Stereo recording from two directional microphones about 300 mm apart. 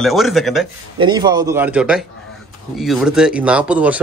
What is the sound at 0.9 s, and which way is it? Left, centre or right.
Speech, centre.